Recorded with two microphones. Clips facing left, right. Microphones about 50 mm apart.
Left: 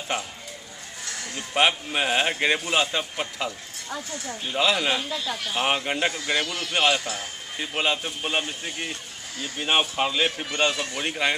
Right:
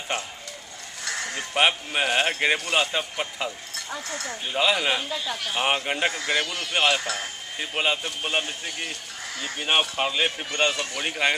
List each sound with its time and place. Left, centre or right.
1.3 s speech: centre